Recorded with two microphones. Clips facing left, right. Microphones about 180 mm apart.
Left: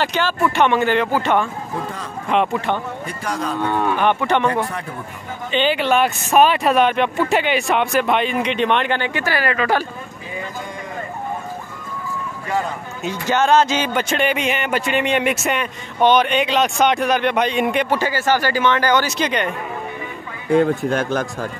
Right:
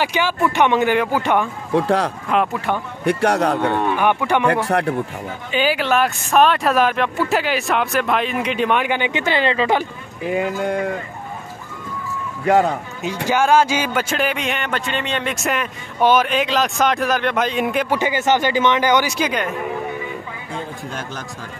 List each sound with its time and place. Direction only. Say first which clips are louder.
0.0 s speech: even; 15° right (ahead or behind)
1.7 s speech: right 10 dB; 85° right
2.3 s speech: left 2 dB; 5° right (ahead or behind)
3.1 s speech: right 10 dB; 70° right (ahead or behind)
3.8 s speech: even; 10° right (ahead or behind)
4.5 s speech: right 4 dB; 75° right (ahead or behind)
5.5 s speech: left 1 dB; 5° right (ahead or behind); by 9.8 s 20° right (ahead or behind)
10.2 s speech: right 11 dB; 75° right (ahead or behind)
13.0 s speech: even; 10° right (ahead or behind); by 15.4 s 10° left (ahead or behind)
15.4 s speech: left 1 dB; centre (ahead or behind)
17.9 s speech: right 1 dB; 20° right (ahead or behind)
20.4 s speech: left 18 dB; 65° left (ahead or behind)